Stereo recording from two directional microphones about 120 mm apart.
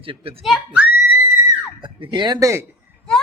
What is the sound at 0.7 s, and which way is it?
Screaming, 10° right (ahead or behind).